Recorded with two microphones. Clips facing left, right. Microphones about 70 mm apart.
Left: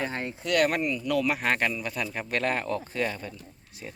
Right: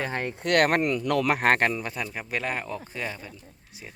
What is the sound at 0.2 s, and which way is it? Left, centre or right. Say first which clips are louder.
Speech: right 3 dB; right.